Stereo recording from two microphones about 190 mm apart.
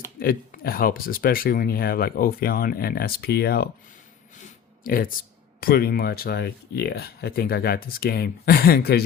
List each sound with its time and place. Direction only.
0.2 s speech: 50° left (ahead or behind)
4.4 s a sound: 45° left (ahead or behind)
5.5 s speech: 50° left (ahead or behind)